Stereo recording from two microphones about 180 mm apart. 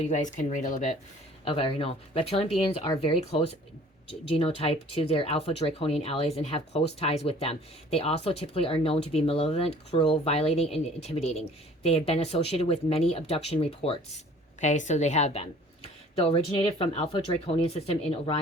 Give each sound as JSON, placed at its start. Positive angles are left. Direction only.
{"t": 0.0, "sound": "speech", "side_deg": 40}
{"t": 1.5, "sound": "speech", "side_deg": 30}